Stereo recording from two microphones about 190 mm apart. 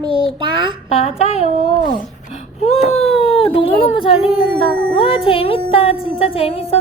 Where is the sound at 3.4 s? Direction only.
30° left (ahead or behind).